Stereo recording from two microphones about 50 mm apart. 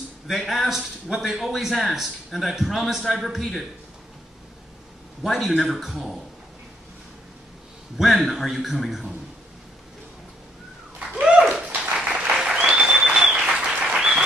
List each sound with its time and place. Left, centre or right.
0.3 s a man's voice: centre
5.2 s a man's voice: centre
8.0 s a man's voice: centre
11.0 s a sound: centre
11.6 s dog: right
12.0 s applause: right